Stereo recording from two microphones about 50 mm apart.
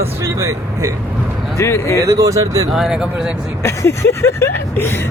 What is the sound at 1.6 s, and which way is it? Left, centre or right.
Speech, left.